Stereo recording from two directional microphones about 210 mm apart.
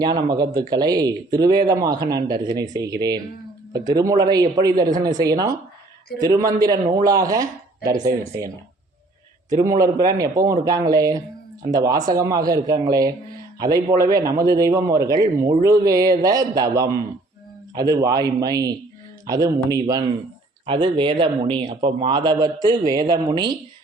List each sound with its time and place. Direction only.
0.0 s a man's voice: 20° right (ahead or behind)